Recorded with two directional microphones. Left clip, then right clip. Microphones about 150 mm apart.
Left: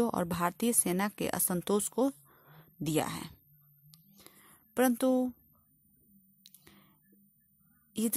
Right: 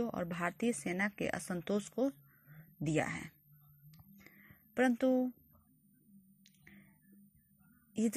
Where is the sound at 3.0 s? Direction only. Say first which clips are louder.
Left 2 dB; 30° left (ahead or behind).